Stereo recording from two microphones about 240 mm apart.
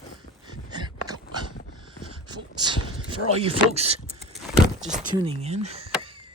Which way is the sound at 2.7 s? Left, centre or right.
Right.